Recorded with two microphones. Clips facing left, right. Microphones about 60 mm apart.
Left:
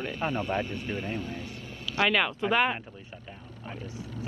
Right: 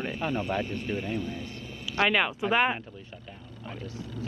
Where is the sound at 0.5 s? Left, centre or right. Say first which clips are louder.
Right 1 dB; left.